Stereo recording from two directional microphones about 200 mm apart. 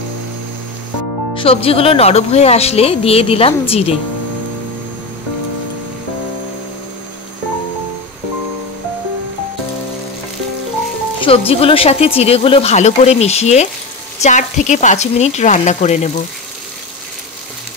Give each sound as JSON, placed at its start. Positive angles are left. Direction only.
{"t": 1.3, "sound": "speech", "side_deg": 25}
{"t": 11.1, "sound": "speech", "side_deg": 30}